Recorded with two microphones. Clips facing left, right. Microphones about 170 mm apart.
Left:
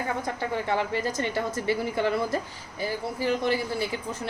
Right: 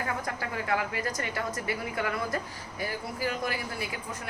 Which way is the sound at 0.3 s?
30° left (ahead or behind).